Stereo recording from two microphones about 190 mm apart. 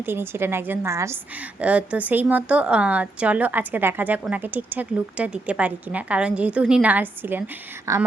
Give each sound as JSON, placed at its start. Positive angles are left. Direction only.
{"t": 0.0, "sound": "a woman's voice", "side_deg": -10}